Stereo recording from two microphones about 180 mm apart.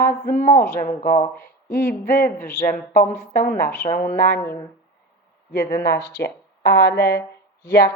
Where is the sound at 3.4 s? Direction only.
55° left (ahead or behind).